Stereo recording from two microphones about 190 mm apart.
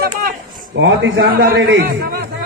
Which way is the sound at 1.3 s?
55° right (ahead or behind).